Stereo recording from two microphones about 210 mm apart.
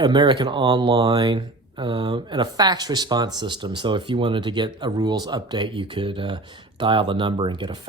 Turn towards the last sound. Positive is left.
turn(degrees=-20)  # may be behind; listen again after turning